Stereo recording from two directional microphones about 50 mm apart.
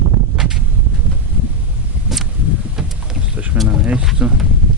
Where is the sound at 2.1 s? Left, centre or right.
Centre.